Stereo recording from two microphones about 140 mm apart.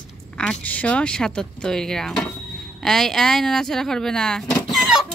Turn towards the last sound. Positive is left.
turn(degrees=0)  # may be behind; listen again after turning